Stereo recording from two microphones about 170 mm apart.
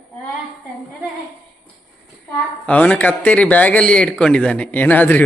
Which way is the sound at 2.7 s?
10° left (ahead or behind).